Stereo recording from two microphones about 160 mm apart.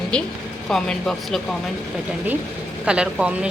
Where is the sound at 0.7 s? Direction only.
5° left (ahead or behind).